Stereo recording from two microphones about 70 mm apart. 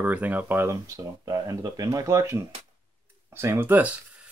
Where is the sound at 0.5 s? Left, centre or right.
Right.